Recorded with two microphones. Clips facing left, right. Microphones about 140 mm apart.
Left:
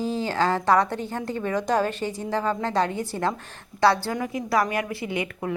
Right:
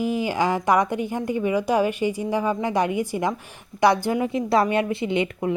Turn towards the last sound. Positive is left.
turn(degrees=-25)  # may be behind; listen again after turning